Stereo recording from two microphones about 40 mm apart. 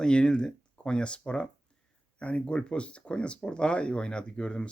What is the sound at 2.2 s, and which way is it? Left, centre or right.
Speech, left.